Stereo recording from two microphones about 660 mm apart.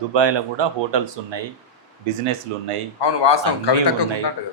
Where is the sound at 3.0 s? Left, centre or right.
Left.